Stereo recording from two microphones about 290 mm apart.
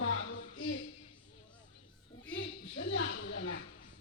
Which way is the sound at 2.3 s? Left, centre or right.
Left.